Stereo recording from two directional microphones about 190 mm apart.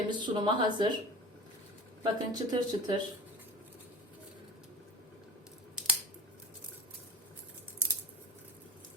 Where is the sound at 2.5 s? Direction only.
25° right (ahead or behind).